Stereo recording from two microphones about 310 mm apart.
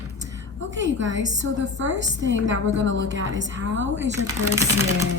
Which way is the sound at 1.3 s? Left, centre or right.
Right.